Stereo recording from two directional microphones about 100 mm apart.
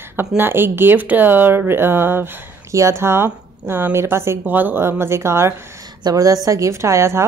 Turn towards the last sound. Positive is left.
turn(degrees=-30)  # may be behind; listen again after turning